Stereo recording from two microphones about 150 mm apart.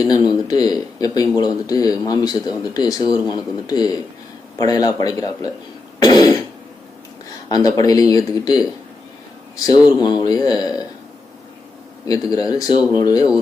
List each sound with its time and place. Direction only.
0.0 s speech: 25° left (ahead or behind)
7.5 s speech: 25° left (ahead or behind)
9.6 s speech: 30° left (ahead or behind)
12.0 s speech: 25° left (ahead or behind)